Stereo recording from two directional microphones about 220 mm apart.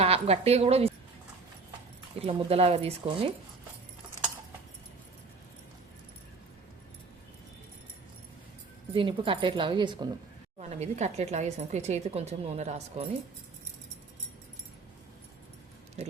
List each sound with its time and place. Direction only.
0.0 s a woman's voice: 30° right (ahead or behind)
2.1 s speech: 25° right (ahead or behind)
8.9 s a woman's voice: 25° right (ahead or behind)